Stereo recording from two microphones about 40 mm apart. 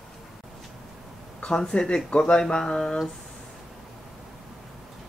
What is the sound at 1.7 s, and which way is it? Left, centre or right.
Mantra, left.